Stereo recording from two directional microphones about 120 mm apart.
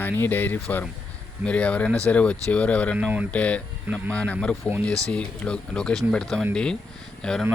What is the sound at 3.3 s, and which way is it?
Speech, 10° left (ahead or behind).